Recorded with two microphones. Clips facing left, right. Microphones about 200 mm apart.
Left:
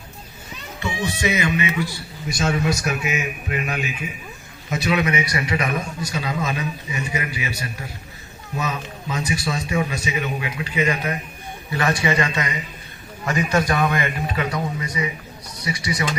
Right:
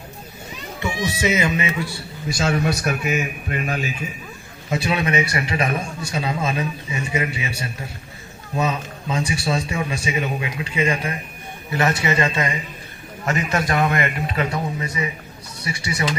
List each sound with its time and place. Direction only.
0.8 s speech: 25° right (ahead or behind)
2.4 s a man's voice: 60° right (ahead or behind); by 16.0 s 25° right (ahead or behind)